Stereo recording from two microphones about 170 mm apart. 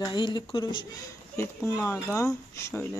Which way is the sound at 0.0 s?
25° left (ahead or behind).